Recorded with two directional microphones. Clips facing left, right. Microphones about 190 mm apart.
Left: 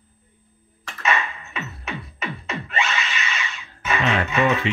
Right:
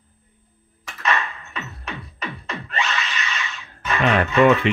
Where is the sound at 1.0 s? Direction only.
5° left (ahead or behind).